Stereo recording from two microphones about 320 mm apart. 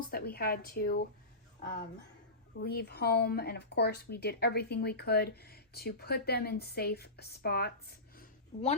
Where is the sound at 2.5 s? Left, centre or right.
Left.